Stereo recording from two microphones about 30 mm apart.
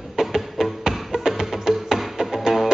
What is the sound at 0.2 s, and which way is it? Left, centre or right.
Music, centre.